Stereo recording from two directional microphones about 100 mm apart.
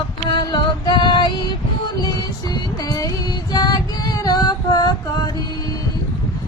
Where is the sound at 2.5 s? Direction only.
40° left (ahead or behind).